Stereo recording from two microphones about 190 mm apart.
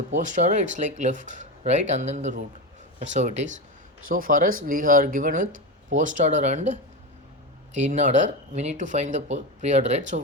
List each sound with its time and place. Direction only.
0.1 s speech: 40° right (ahead or behind)